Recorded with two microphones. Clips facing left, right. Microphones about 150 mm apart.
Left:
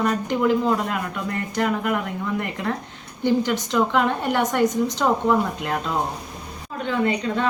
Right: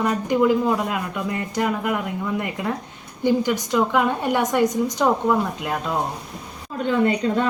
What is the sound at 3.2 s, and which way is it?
Speech, 10° right (ahead or behind).